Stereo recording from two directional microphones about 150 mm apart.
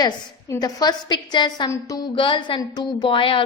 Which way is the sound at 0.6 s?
25° left (ahead or behind).